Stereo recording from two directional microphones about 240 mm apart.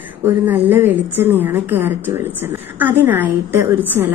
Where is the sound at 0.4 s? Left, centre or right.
Centre.